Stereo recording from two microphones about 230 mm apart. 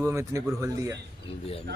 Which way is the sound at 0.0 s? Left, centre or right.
Centre.